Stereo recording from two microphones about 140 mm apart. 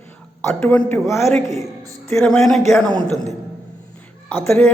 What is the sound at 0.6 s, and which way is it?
Speech, 10° left (ahead or behind).